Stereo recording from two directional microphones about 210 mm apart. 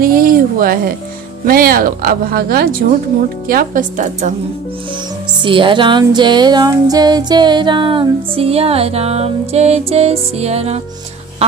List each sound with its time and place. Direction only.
0.0 s speech: 45° right (ahead or behind)
5.4 s music: 25° right (ahead or behind)